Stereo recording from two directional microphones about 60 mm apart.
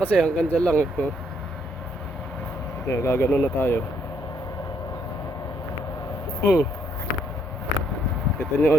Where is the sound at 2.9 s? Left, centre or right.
Left.